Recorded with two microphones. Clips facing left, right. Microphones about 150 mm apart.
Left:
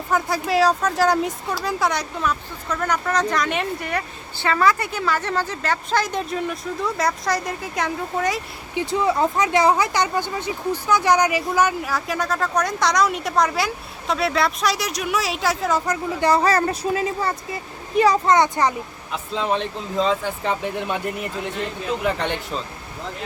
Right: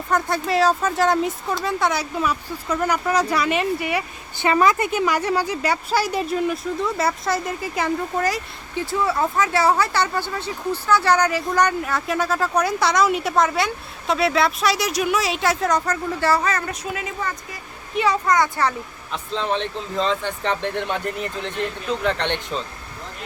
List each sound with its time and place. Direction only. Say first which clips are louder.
0.1 s speech: even; centre (ahead or behind)
4.4 s speech: right 2 dB; 20° right (ahead or behind); by 8.4 s centre (ahead or behind)
8.7 s speech: left 2 dB; 20° left (ahead or behind); by 15.8 s centre (ahead or behind)
15.9 s speech: left 1 dB; 15° left (ahead or behind)
16.4 s speech: left 5 dB; 35° left (ahead or behind)
18.3 s speech: left 2 dB; 20° left (ahead or behind)
19.1 s speech: left 1 dB; 5° left (ahead or behind)